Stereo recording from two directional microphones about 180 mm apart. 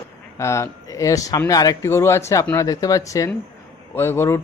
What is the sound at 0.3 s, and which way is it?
Speech, 15° left (ahead or behind).